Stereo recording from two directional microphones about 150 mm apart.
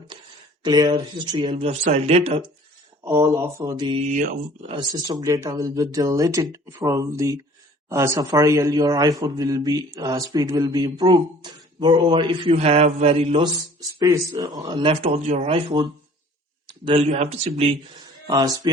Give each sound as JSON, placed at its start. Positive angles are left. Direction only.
{"t": 0.6, "sound": "speech", "side_deg": -30}
{"t": 1.8, "sound": "speech", "side_deg": -45}
{"t": 3.0, "sound": "a man's voice", "side_deg": -20}
{"t": 14.0, "sound": "speech", "side_deg": -25}
{"t": 18.3, "sound": "a man's voice", "side_deg": -25}